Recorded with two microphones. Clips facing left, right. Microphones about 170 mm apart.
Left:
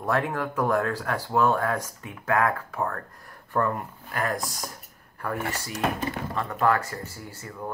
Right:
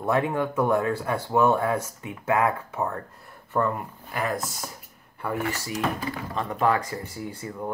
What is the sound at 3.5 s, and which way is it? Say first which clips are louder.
Speech: right 1 dB; 5° right (ahead or behind).